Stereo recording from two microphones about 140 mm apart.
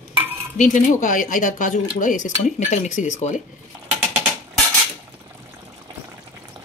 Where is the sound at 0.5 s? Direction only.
65° left (ahead or behind).